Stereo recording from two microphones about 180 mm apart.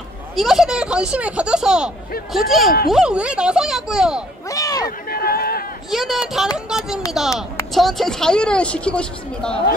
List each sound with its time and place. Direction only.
0.4 s a woman's voice: centre (ahead or behind)
4.5 s a sound: 20° left (ahead or behind)
4.8 s run: 55° left (ahead or behind)
5.9 s a woman's voice: centre (ahead or behind)